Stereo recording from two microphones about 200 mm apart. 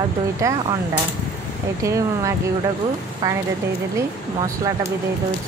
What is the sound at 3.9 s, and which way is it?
Speech, 15° right (ahead or behind).